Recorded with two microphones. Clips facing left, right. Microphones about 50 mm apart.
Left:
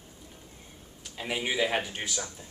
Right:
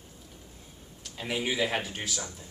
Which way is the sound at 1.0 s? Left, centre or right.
Centre.